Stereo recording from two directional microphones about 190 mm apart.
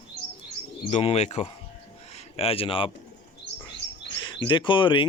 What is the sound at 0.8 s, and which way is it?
Speech, 35° left (ahead or behind).